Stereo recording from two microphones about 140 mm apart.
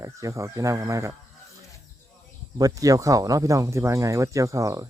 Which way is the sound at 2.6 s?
25° right (ahead or behind).